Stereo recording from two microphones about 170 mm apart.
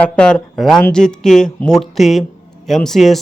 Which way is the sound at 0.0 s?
5° left (ahead or behind).